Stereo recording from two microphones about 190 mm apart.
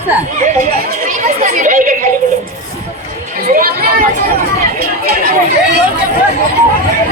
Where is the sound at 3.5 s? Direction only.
50° right (ahead or behind).